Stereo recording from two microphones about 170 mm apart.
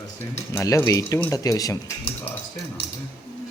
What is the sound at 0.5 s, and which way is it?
Cutlery, 15° left (ahead or behind).